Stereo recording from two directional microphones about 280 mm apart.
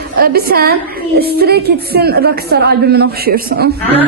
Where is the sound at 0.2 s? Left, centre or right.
Right.